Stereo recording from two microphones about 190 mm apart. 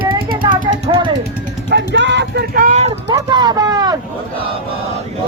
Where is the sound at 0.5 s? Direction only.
45° right (ahead or behind).